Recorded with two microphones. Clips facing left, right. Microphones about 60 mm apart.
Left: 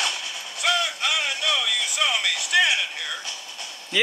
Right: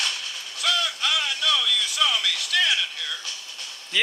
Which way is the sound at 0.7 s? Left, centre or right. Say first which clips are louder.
Left 2 dB; left.